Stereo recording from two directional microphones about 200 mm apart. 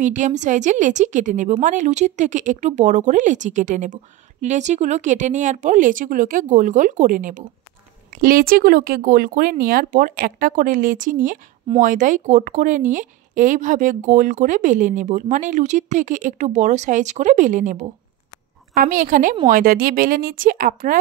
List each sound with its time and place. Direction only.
0.0 s a woman's voice: 40° right (ahead or behind)